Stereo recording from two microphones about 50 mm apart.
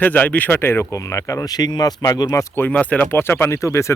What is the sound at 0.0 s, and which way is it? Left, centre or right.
Speech, left.